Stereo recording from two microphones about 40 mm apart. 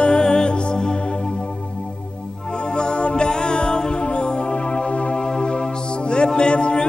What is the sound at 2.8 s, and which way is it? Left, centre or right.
Music, left.